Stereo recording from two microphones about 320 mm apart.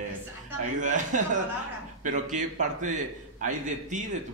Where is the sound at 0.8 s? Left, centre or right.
Right.